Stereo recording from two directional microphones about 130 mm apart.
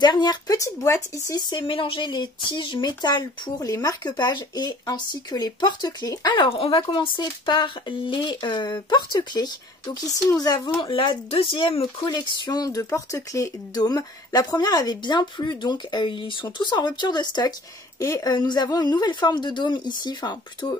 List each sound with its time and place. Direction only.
0.0 s speech: 35° left (ahead or behind)
10.8 s speech: 40° left (ahead or behind)
12.0 s speech: 30° left (ahead or behind)